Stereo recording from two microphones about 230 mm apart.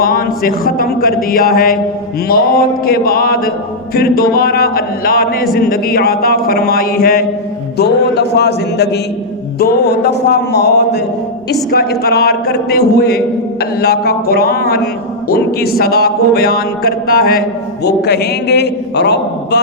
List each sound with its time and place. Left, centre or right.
0.0 s a man's voice: left